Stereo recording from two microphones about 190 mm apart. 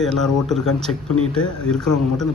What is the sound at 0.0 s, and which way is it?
A woman's voice, centre (ahead or behind).